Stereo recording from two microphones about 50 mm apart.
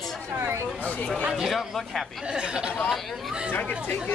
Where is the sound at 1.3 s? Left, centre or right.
Centre.